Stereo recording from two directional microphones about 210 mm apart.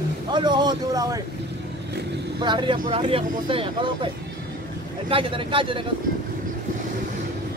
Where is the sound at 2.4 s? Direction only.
20° right (ahead or behind).